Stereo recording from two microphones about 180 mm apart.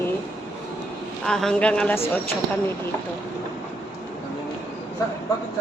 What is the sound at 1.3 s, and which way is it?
Speech, 5° left (ahead or behind).